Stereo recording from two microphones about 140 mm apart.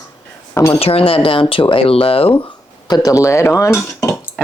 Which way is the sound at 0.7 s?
45° left (ahead or behind).